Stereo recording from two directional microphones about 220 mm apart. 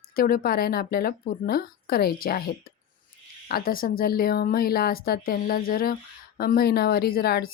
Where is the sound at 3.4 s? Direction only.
40° left (ahead or behind).